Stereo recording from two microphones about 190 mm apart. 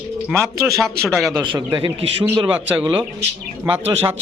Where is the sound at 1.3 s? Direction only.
20° right (ahead or behind).